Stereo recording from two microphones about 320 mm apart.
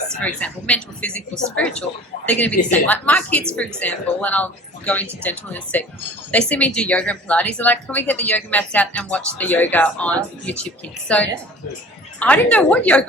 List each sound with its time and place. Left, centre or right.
0.2 s speech: centre